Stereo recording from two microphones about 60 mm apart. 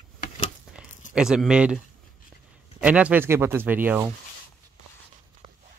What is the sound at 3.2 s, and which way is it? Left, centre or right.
Speech, right.